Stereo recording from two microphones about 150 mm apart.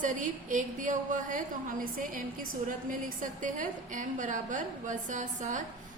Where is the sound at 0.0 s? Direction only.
60° right (ahead or behind).